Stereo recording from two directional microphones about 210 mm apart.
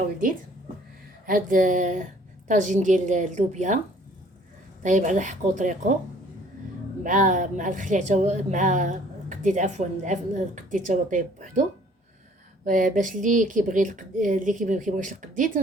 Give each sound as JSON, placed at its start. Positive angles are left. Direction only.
{"t": 1.3, "sound": "speech", "side_deg": -40}
{"t": 4.8, "sound": "speech", "side_deg": -35}
{"t": 7.0, "sound": "speech", "side_deg": -40}
{"t": 12.6, "sound": "speech", "side_deg": -40}